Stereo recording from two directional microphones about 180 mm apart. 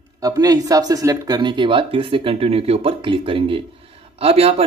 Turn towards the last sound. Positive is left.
turn(degrees=-35)  # may be behind; listen again after turning